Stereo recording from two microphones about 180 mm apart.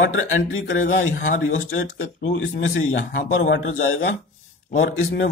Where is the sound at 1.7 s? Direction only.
85° left.